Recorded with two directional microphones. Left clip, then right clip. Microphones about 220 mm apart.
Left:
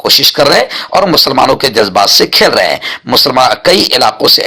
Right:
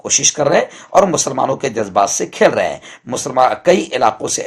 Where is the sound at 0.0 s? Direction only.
15° left (ahead or behind).